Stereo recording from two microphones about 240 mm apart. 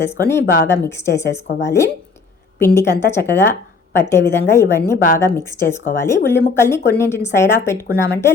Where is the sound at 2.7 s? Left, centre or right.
Centre.